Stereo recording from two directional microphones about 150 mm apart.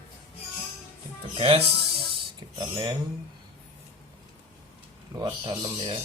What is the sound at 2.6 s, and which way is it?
Speech, 30° right (ahead or behind).